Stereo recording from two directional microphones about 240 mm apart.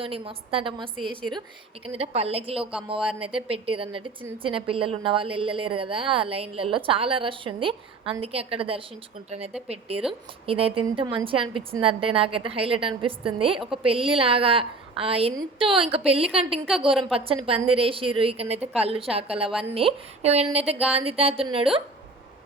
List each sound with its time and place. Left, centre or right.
0.0 s a woman's voice: right
10.0 s a woman's voice: centre
10.4 s a woman's voice: right
19.5 s a woman's voice: centre
19.7 s a woman's voice: right